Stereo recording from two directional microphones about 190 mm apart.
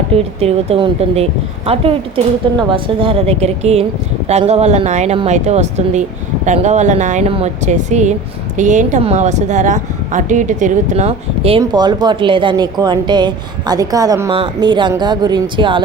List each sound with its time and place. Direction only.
0.1 s speech: 30° right (ahead or behind)
11.6 s a woman's voice: 20° right (ahead or behind)